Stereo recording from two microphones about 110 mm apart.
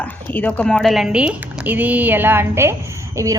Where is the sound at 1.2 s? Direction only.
15° right (ahead or behind).